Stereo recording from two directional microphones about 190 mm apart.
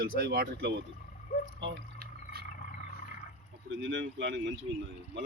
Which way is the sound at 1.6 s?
70° right (ahead or behind).